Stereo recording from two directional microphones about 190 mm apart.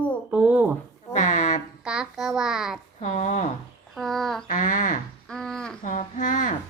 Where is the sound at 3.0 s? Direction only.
40° left (ahead or behind).